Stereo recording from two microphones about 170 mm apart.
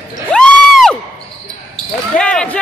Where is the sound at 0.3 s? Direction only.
5° left (ahead or behind).